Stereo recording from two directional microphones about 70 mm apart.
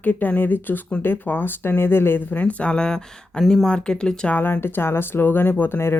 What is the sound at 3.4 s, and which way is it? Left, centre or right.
Speech, centre.